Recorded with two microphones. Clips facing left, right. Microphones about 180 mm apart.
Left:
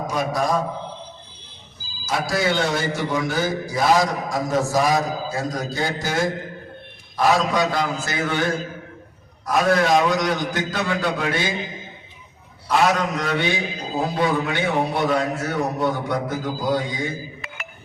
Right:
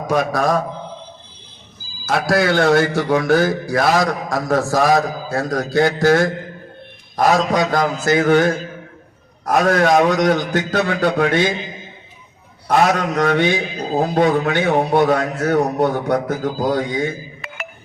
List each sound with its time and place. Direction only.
0.1 s a man's voice: 65° right (ahead or behind)
2.0 s a man's voice: 65° right (ahead or behind)
7.2 s a man's voice: 45° right (ahead or behind)
9.5 s a man's voice: 55° right (ahead or behind)
12.6 s a man's voice: 55° right (ahead or behind)